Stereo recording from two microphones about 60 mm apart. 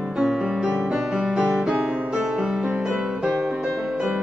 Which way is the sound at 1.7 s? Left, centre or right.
Right.